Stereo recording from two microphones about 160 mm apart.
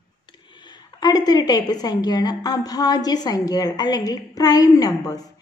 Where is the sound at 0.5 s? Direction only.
25° left (ahead or behind).